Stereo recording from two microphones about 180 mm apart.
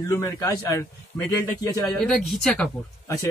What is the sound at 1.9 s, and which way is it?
Speech, 5° left (ahead or behind).